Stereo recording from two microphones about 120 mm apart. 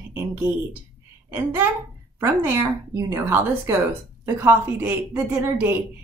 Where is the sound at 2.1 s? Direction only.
20° right (ahead or behind).